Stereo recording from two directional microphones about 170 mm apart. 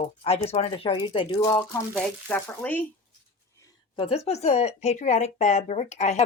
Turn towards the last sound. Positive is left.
turn(degrees=40)  # may be behind; listen again after turning